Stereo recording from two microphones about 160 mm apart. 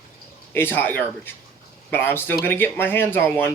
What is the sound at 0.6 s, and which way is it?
Speech, 15° left (ahead or behind).